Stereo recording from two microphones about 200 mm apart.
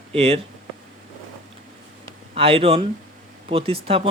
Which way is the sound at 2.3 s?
30° right (ahead or behind).